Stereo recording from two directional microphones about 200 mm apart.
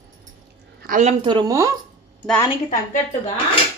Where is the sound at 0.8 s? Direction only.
40° right (ahead or behind); by 1.7 s 20° right (ahead or behind).